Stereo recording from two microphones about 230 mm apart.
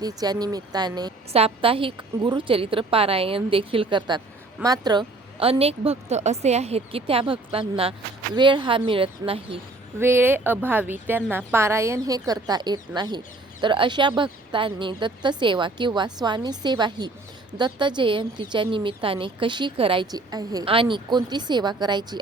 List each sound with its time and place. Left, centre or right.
0.0 s a woman's voice: centre
10.0 s a woman's voice: centre